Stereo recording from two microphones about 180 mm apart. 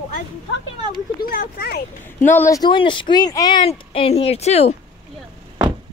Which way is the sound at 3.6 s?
35° left (ahead or behind).